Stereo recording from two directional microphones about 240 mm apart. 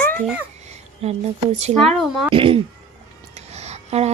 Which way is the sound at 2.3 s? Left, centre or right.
Right.